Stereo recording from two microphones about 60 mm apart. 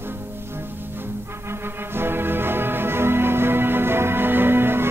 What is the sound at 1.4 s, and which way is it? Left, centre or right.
Music, right.